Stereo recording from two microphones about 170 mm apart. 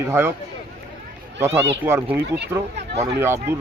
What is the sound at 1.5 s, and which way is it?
Speech, 90° right.